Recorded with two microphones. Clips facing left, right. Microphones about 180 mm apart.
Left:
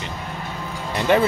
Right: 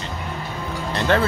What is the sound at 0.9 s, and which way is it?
Speech, 15° left (ahead or behind).